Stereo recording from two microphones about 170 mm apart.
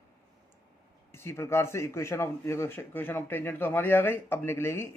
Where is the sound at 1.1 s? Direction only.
15° left (ahead or behind).